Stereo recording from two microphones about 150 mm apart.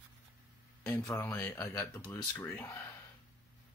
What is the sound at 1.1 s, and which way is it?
Speech, 20° left (ahead or behind).